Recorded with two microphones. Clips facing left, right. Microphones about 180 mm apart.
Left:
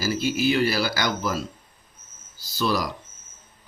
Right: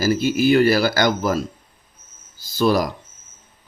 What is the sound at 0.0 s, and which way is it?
Speech, 50° right (ahead or behind).